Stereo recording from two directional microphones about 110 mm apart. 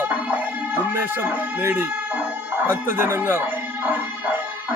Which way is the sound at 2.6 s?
20° right (ahead or behind).